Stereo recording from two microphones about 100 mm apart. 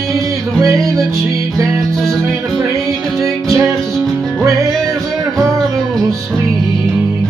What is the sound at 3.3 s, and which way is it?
Music, 30° right (ahead or behind).